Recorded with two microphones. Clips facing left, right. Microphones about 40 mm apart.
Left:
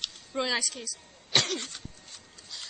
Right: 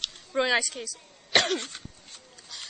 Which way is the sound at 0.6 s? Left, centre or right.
Centre.